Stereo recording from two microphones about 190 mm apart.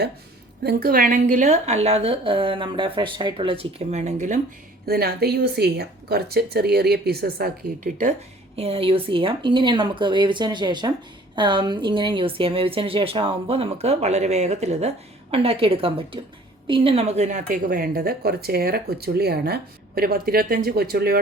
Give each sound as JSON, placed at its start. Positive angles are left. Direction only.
{"t": 0.6, "sound": "a woman's voice", "side_deg": -55}
{"t": 4.9, "sound": "speech", "side_deg": -55}
{"t": 8.5, "sound": "speech", "side_deg": -30}